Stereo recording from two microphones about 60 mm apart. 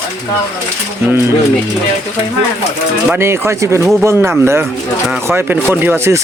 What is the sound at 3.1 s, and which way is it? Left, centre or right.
Speech, right.